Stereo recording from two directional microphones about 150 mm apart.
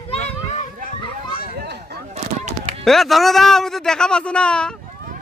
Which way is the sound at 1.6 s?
90° right.